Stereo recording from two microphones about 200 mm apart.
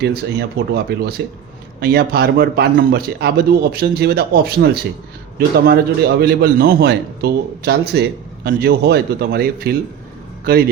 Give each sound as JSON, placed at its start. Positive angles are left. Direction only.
{"t": 0.0, "sound": "a man's voice", "side_deg": -55}